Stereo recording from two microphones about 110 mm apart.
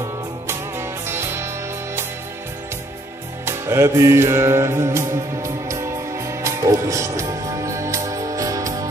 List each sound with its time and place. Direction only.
0.5 s music: 20° right (ahead or behind)
3.4 s music: 25° right (ahead or behind)